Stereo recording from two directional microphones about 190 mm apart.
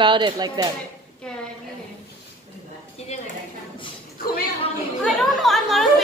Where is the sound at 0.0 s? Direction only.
25° right (ahead or behind).